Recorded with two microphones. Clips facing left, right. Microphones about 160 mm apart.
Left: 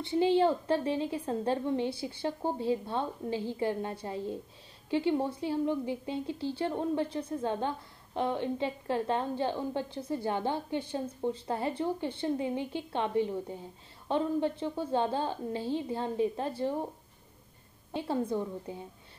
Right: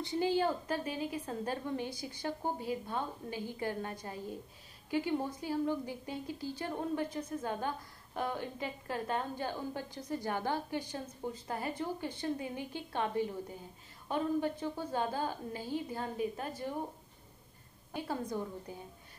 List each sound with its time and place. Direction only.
0.0 s a woman's voice: 25° left (ahead or behind)
17.9 s a woman's voice: 25° left (ahead or behind)